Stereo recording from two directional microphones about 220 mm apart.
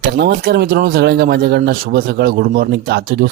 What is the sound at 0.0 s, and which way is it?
Speech, 45° right (ahead or behind).